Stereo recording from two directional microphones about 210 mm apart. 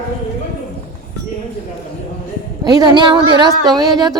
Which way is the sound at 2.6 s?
20° right (ahead or behind).